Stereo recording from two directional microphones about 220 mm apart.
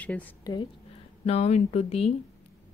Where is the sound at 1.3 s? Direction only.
30° left (ahead or behind).